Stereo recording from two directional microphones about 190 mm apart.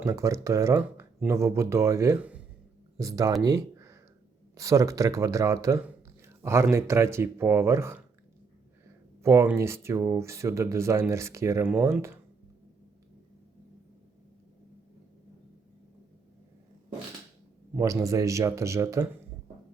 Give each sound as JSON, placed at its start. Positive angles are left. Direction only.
{"t": 0.0, "sound": "speech", "side_deg": -15}
{"t": 9.2, "sound": "speech", "side_deg": -15}
{"t": 17.7, "sound": "speech", "side_deg": -15}